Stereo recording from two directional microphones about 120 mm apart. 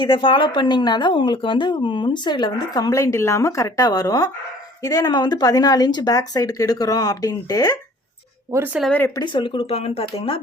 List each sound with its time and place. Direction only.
0.0 s speech: 40° left (ahead or behind)
8.5 s speech: 15° right (ahead or behind)
8.9 s speech: 15° left (ahead or behind)
9.1 s speech: 40° left (ahead or behind)